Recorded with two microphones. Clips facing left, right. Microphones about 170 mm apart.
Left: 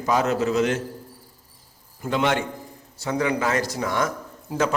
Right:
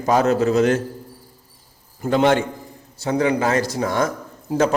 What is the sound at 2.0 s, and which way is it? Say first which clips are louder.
A man's voice: right 6 dB; 40° right (ahead or behind).